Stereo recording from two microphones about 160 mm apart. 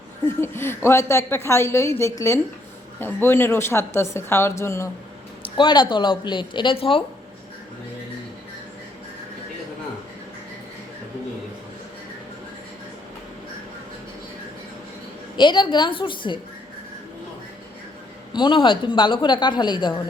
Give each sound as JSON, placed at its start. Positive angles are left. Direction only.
{"t": 0.4, "sound": "a woman's voice", "side_deg": 15}
{"t": 5.5, "sound": "a woman's voice", "side_deg": 30}
{"t": 15.4, "sound": "a woman's voice", "side_deg": 30}
{"t": 18.3, "sound": "a woman's voice", "side_deg": 30}